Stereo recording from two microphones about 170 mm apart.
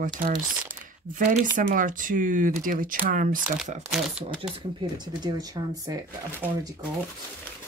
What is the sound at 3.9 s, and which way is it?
Speech, 5° right (ahead or behind).